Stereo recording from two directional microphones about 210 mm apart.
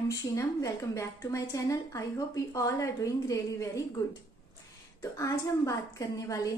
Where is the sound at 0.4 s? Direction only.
15° left (ahead or behind).